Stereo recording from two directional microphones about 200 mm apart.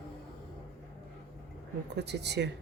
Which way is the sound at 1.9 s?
55° right (ahead or behind).